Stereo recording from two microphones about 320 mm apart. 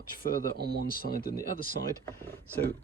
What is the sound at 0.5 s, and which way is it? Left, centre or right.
Speech, right.